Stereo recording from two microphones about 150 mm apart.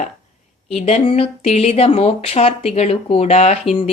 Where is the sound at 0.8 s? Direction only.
45° left (ahead or behind).